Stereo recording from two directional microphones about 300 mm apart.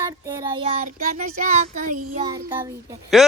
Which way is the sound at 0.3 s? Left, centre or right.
Centre.